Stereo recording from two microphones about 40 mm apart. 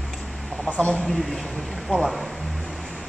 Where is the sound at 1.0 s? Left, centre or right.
Centre.